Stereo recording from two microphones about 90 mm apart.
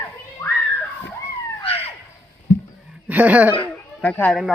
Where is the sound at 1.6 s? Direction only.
90° left.